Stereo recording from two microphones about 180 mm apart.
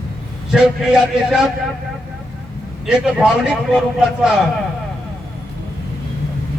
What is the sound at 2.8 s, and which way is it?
A man's voice, centre (ahead or behind).